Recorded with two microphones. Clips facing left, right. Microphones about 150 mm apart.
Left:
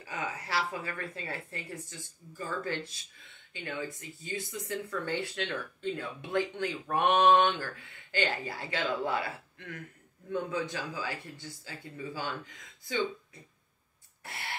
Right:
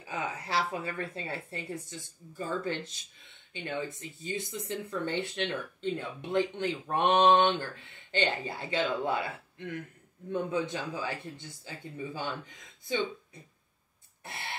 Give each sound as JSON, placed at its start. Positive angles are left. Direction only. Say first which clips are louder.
{"t": 0.5, "sound": "speech", "louder": "right 2 dB", "side_deg": -25}